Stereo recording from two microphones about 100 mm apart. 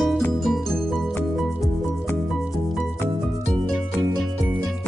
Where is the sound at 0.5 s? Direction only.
5° left (ahead or behind).